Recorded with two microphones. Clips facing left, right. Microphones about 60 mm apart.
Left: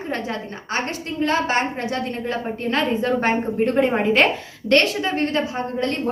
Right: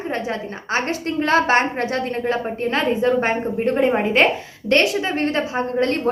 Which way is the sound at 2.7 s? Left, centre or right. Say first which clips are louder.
Right 2 dB; centre.